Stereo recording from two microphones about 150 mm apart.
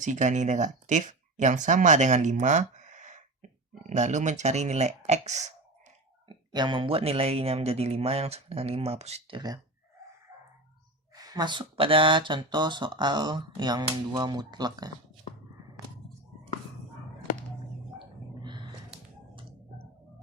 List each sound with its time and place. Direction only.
0.0 s speech: 55° right (ahead or behind)
6.2 s speech: 30° right (ahead or behind)
11.1 s speech: 25° right (ahead or behind)